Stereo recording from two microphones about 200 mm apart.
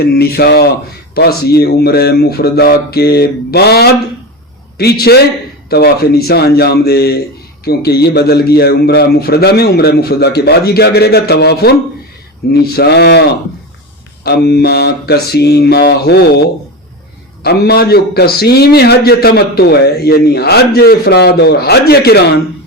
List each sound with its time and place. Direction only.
0.0 s a man's voice: 50° left (ahead or behind)
14.3 s a man's voice: 55° left (ahead or behind)
17.4 s a man's voice: 55° left (ahead or behind)